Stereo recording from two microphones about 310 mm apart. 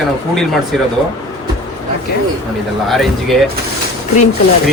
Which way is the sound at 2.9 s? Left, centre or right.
Centre.